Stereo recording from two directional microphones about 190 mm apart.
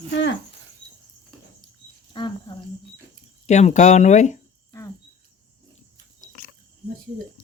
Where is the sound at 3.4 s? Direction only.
35° left (ahead or behind).